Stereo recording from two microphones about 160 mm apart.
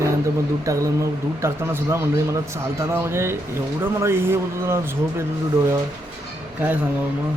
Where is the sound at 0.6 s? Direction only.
20° right (ahead or behind).